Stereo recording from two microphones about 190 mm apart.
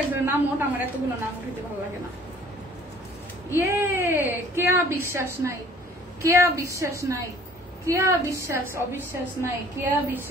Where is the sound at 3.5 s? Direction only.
15° right (ahead or behind).